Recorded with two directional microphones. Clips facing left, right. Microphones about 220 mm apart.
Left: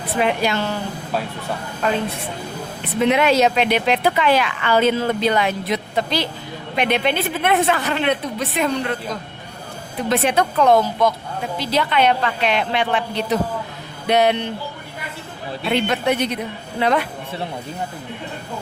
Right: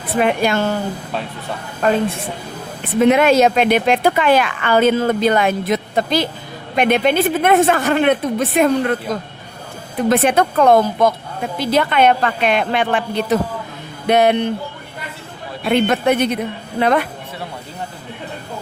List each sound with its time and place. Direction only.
0.2 s speech: 50° right (ahead or behind)
1.8 s speech: 50° right (ahead or behind)
3.0 s speech: 50° right (ahead or behind)
10.1 s speech: 50° right (ahead or behind)
15.6 s speech: 50° right (ahead or behind)